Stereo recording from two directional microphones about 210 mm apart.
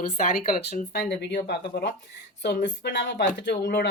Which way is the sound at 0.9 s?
55° left (ahead or behind).